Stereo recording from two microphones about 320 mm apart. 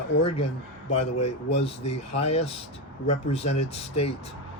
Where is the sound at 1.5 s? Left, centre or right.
Centre.